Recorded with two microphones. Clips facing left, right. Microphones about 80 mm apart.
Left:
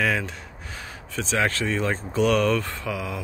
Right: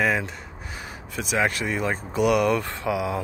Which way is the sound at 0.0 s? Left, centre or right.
Centre.